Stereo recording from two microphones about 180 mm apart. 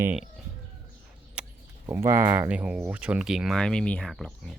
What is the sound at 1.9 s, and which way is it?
Speech, 15° right (ahead or behind).